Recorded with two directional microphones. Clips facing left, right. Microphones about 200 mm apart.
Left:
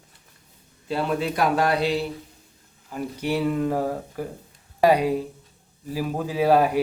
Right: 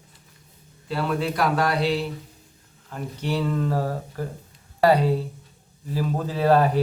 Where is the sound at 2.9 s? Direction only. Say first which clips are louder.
Left 2 dB; 10° left (ahead or behind).